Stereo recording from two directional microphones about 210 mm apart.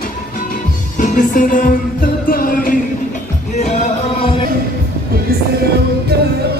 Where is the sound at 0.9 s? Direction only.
40° left (ahead or behind).